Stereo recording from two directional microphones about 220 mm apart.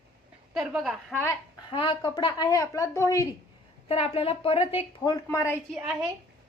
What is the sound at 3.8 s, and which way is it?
A woman's voice, 25° left (ahead or behind).